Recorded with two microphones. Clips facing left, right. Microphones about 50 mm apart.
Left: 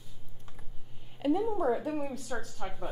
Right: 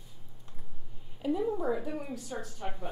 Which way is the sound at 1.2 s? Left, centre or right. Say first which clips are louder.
Left 2 dB; left.